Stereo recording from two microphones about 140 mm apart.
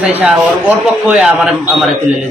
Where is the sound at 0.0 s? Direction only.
10° right (ahead or behind).